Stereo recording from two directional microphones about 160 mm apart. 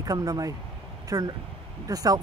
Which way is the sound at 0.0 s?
20° right (ahead or behind).